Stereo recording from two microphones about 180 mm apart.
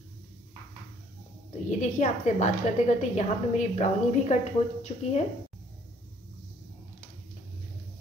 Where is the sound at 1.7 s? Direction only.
40° left (ahead or behind).